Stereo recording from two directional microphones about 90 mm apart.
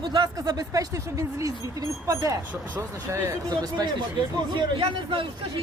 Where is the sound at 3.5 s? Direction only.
50° right (ahead or behind).